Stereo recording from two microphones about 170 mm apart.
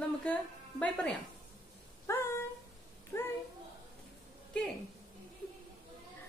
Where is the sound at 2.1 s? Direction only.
15° left (ahead or behind).